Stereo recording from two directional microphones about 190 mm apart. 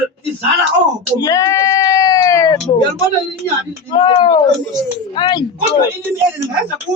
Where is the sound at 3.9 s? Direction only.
25° left (ahead or behind).